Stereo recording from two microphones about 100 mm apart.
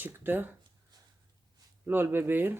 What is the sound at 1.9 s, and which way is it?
Speech, 20° right (ahead or behind).